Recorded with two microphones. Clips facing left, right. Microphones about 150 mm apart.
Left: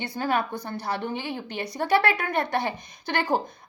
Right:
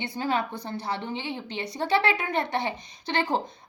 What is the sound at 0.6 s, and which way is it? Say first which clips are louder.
A woman's voice: left 2 dB; 25° right (ahead or behind).